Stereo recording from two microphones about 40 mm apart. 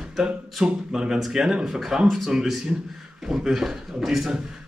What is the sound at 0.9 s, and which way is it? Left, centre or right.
Speech, centre.